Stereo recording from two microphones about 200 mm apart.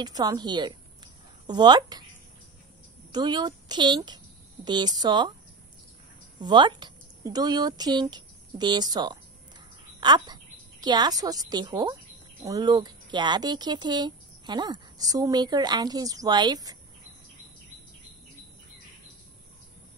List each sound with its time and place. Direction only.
0.0 s a woman's voice: 20° right (ahead or behind)
3.1 s speech: 20° right (ahead or behind)
6.4 s a woman's voice: 20° right (ahead or behind)